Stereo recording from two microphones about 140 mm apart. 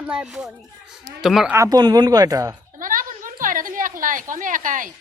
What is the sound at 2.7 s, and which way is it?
A woman's voice, 75° right (ahead or behind).